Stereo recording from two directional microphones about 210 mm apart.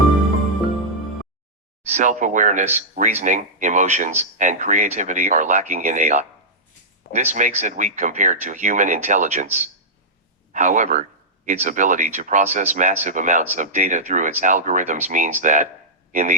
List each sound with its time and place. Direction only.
1.8 s speech: 35° right (ahead or behind)